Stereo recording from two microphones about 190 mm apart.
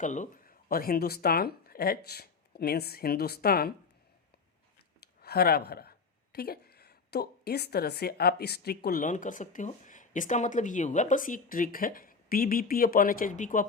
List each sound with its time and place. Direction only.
0.0 s speech: 40° left (ahead or behind)
4.9 s a sound: 55° left (ahead or behind)
6.3 s a woman's voice: 55° left (ahead or behind)